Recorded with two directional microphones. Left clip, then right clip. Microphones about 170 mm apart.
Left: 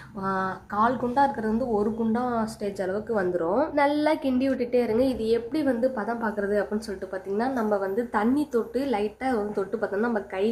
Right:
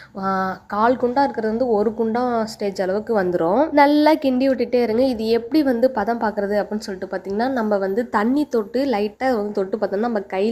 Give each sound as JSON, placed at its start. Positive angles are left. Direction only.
{"t": 0.2, "sound": "speech", "side_deg": -40}